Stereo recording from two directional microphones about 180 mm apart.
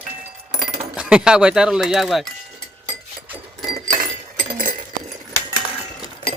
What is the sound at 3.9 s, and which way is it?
Chink, 50° right (ahead or behind).